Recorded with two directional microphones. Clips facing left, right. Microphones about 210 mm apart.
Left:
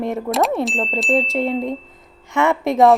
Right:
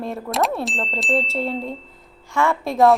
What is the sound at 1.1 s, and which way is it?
A woman's voice, 15° left (ahead or behind).